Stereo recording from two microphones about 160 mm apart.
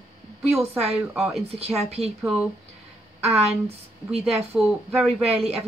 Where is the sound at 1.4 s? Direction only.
40° right (ahead or behind).